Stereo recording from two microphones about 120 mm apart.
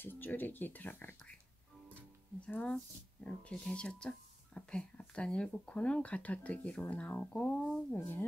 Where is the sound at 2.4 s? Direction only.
10° left (ahead or behind).